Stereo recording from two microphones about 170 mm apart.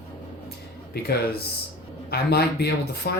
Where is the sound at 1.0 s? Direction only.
70° left (ahead or behind).